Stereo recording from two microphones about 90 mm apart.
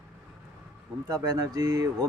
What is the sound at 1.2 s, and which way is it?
Speech, 40° right (ahead or behind).